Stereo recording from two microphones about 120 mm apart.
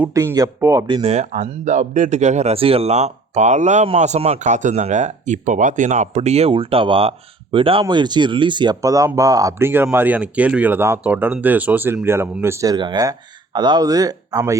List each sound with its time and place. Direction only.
0.1 s speech: 25° right (ahead or behind)
1.0 s speech: 70° right (ahead or behind); by 8.8 s 40° right (ahead or behind)
8.8 s speech: 30° right (ahead or behind)
12.7 s speech: 40° right (ahead or behind)